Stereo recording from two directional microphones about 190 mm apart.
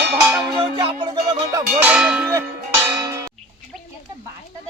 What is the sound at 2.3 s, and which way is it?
Cowbell, 15° right (ahead or behind).